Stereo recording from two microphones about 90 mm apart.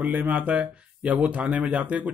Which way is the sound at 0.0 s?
20° right (ahead or behind).